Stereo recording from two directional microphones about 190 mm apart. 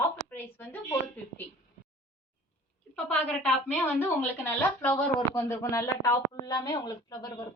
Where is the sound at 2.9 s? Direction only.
5° left (ahead or behind).